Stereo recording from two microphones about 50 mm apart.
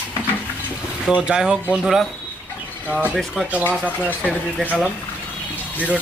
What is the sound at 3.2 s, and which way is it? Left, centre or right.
Speech, centre.